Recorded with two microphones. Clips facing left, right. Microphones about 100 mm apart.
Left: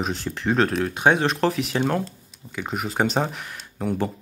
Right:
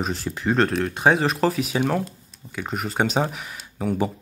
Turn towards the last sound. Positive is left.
turn(degrees=-5)  # may be behind; listen again after turning